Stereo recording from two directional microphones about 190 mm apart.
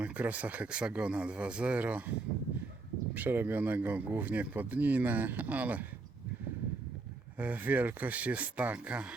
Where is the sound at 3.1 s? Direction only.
10° right (ahead or behind).